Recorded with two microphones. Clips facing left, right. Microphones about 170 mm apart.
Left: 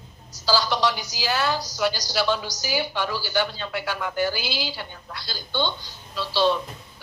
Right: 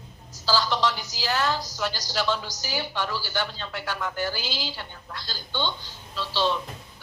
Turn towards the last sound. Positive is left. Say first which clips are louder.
# left 4 dB
turn(degrees=15)  # may be behind; listen again after turning